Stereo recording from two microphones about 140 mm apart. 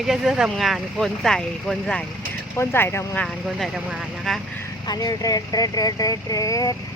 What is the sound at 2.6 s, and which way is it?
Speech, 15° left (ahead or behind).